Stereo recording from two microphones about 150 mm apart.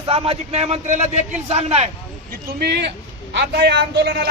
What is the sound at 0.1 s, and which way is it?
A man's voice, 40° right (ahead or behind).